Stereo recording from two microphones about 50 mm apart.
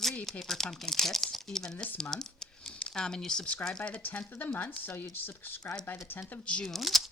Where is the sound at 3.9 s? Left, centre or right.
Left.